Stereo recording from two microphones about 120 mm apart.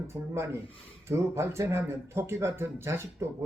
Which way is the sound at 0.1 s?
25° right (ahead or behind).